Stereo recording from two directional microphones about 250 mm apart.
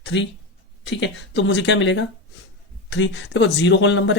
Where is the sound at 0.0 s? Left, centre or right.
Left.